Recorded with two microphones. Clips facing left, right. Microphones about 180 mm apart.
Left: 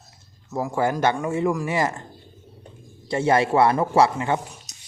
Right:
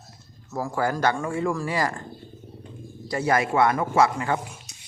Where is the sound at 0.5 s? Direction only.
20° left (ahead or behind).